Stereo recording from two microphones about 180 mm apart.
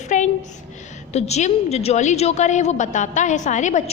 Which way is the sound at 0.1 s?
45° left (ahead or behind).